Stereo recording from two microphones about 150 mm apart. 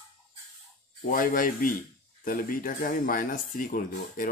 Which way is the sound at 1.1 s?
70° left (ahead or behind).